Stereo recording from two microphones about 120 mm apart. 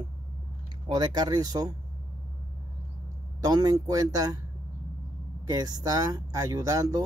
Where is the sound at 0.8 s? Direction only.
35° right (ahead or behind).